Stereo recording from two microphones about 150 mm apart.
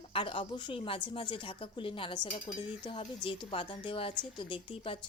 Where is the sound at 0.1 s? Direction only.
35° left (ahead or behind).